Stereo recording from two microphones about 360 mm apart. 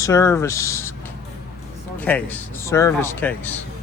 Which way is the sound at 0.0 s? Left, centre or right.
Centre.